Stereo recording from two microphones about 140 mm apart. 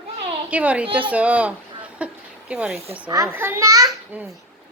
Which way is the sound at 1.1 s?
10° right (ahead or behind).